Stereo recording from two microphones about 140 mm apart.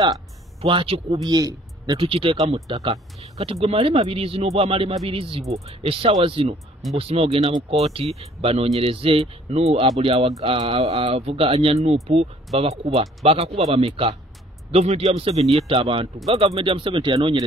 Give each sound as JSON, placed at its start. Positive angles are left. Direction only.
{"t": 0.6, "sound": "a man's voice", "side_deg": -40}
{"t": 2.0, "sound": "speech", "side_deg": -40}